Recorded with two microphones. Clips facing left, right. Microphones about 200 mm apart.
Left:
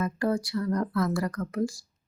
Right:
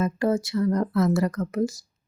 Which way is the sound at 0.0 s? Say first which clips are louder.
Right 4 dB; 25° right (ahead or behind).